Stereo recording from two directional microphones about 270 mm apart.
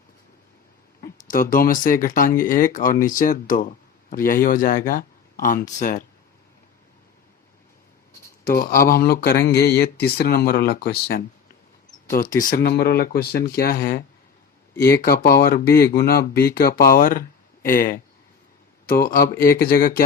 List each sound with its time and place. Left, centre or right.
1.0 s speech: left
4.9 s a sound: left
8.4 s speech: left